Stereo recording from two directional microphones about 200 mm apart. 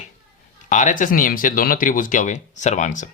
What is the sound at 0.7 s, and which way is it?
Speech, 40° left (ahead or behind).